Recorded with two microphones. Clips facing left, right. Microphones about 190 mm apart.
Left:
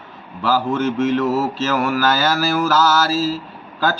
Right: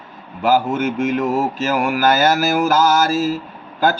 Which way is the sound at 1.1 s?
15° right (ahead or behind).